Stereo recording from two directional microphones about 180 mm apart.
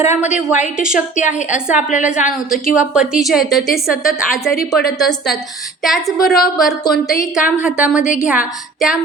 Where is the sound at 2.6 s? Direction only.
50° left (ahead or behind).